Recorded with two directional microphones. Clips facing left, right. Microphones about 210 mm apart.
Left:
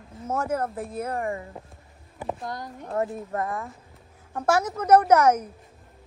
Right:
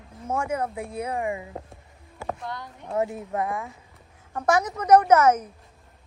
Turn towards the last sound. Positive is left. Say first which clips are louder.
# even
turn(degrees=10)  # may be behind; listen again after turning